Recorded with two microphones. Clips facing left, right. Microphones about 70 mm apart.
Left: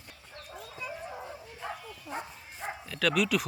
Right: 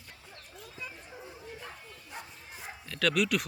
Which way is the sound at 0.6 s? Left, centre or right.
Centre.